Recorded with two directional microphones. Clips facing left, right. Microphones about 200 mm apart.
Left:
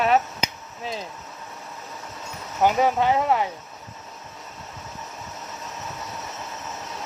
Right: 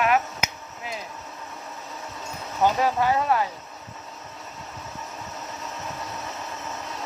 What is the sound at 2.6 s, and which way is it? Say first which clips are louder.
Speech: left 2 dB; 20° left (ahead or behind).